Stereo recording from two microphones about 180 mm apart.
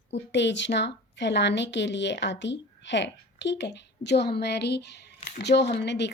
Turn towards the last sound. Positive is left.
turn(degrees=70)  # may be behind; listen again after turning